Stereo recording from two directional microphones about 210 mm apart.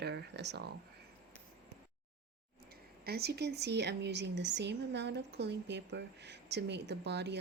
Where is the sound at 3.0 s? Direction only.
50° right (ahead or behind).